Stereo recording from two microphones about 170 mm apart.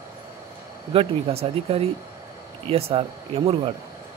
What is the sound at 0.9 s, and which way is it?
Speech, 35° right (ahead or behind).